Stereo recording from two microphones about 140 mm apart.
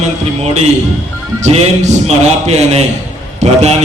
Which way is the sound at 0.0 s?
50° right (ahead or behind).